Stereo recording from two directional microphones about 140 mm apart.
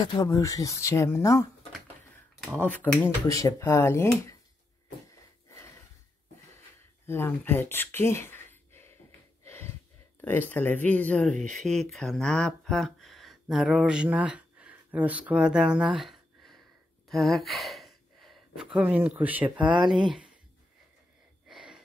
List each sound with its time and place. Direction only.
0.0 s speech: 30° left (ahead or behind)
2.5 s speech: 10° left (ahead or behind)
3.3 s speech: 20° left (ahead or behind)
7.1 s speech: 15° left (ahead or behind)
9.4 s gasp: 20° left (ahead or behind)
10.5 s speech: 15° left (ahead or behind); by 20.2 s 5° right (ahead or behind)
21.5 s gasp: 5° right (ahead or behind)